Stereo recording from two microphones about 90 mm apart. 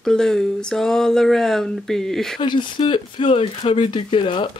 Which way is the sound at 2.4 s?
60° left (ahead or behind).